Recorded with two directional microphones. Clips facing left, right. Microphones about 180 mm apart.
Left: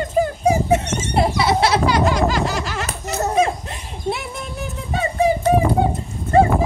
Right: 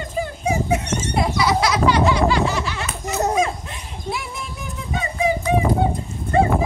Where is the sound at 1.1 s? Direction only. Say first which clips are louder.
Left 3 dB; 30° left (ahead or behind).